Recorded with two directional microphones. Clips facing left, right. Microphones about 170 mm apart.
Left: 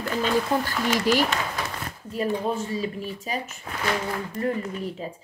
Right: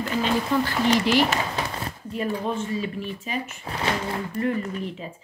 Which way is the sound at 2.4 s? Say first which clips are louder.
Even; 35° left (ahead or behind).